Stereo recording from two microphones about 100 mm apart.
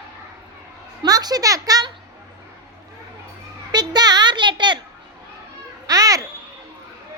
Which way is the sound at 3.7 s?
45° right (ahead or behind).